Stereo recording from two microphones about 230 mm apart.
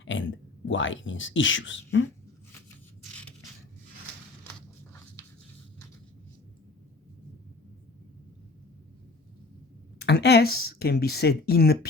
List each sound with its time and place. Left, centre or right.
0.0 s speech: left
3.0 s a sound: centre
10.0 s speech: left